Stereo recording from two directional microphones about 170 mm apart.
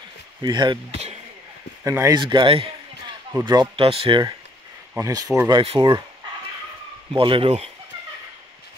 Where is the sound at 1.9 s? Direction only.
20° right (ahead or behind).